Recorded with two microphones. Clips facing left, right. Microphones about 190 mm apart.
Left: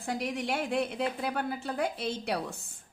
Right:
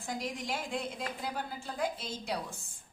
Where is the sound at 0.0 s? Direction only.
65° left (ahead or behind).